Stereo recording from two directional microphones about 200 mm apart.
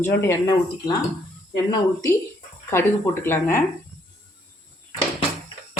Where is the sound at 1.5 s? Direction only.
20° left (ahead or behind).